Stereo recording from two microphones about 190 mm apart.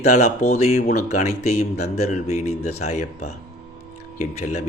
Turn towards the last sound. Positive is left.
turn(degrees=35)  # may be behind; listen again after turning